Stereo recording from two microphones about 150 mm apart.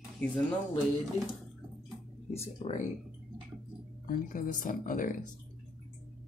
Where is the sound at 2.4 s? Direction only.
55° left (ahead or behind).